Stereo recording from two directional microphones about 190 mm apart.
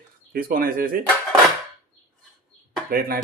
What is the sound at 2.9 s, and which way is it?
Speech, 50° right (ahead or behind).